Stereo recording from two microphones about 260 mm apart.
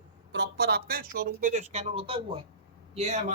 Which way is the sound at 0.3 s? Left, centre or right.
Right.